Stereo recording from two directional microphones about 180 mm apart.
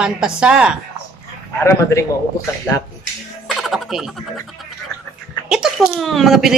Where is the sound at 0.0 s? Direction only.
5° right (ahead or behind).